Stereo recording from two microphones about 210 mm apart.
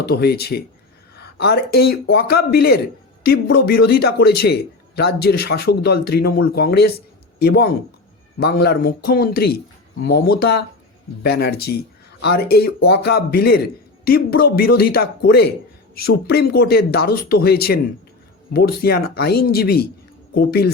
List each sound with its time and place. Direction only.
0.0 s a man's voice: 50° left (ahead or behind)